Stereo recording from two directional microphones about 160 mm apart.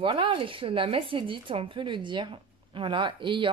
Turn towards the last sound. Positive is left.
turn(degrees=-30)  # may be behind; listen again after turning